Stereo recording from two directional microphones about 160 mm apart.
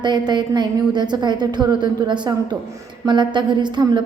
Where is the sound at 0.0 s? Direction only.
25° right (ahead or behind).